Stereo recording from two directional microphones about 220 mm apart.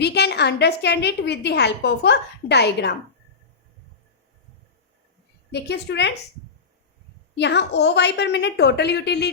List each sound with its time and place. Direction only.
0.0 s a woman's voice: 50° left (ahead or behind)
5.5 s a woman's voice: 50° left (ahead or behind)
7.3 s a woman's voice: 50° left (ahead or behind)